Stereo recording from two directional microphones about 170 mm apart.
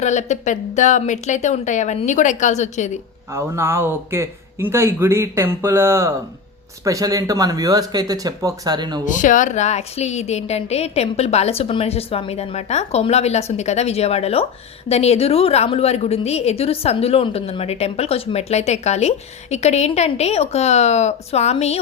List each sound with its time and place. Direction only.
0.0 s a woman's voice: 45° left (ahead or behind)
3.3 s speech: 15° right (ahead or behind)
9.0 s a woman's voice: 50° left (ahead or behind)